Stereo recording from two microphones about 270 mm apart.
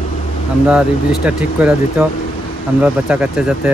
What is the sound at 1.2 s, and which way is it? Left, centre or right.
Speech, centre.